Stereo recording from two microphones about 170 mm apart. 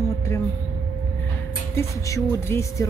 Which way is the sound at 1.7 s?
20° left (ahead or behind).